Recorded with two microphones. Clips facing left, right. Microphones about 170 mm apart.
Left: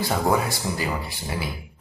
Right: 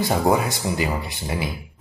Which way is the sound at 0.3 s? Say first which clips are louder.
Right 3 dB; 20° right (ahead or behind).